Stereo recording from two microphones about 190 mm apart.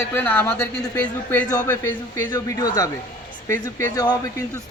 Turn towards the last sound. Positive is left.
turn(degrees=20)  # may be behind; listen again after turning